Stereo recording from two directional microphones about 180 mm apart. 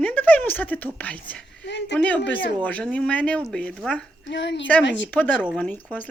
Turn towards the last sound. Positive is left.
turn(degrees=10)  # may be behind; listen again after turning